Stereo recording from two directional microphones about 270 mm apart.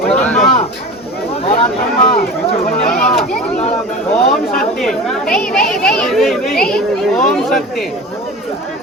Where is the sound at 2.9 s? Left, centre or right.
Centre.